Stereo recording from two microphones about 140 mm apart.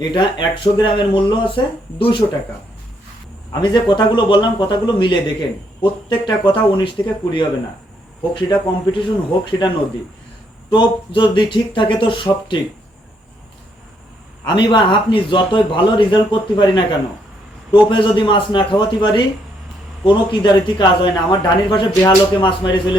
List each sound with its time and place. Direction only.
0.1 s speech: 35° left (ahead or behind)
3.5 s speech: 30° left (ahead or behind)
14.4 s speech: 35° left (ahead or behind)